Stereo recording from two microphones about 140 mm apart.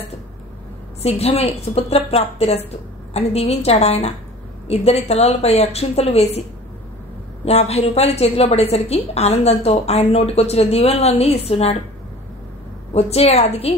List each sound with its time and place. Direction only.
1.0 s a woman's voice: 45° left (ahead or behind)
7.4 s a woman's voice: 50° left (ahead or behind)
12.9 s a woman's voice: 50° left (ahead or behind)